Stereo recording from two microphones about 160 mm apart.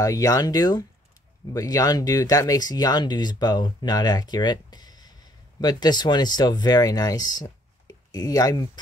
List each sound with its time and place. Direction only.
0.0 s speech: 20° left (ahead or behind)